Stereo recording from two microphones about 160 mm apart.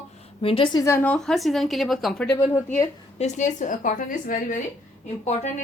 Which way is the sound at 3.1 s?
45° left (ahead or behind).